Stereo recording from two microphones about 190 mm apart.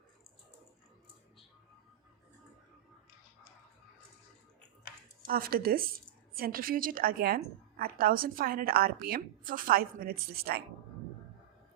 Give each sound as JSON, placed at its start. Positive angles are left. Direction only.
{"t": 5.2, "sound": "a woman's voice", "side_deg": -50}